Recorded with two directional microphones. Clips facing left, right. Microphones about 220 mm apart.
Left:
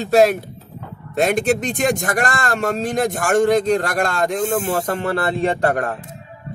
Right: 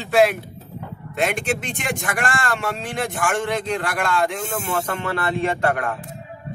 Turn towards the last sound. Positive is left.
turn(degrees=35)  # may be behind; listen again after turning